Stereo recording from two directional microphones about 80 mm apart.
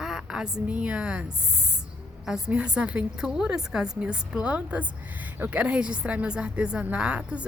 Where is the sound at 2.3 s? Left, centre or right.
Centre.